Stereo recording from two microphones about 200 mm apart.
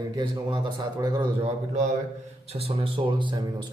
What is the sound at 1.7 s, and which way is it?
A man's voice, 35° right (ahead or behind).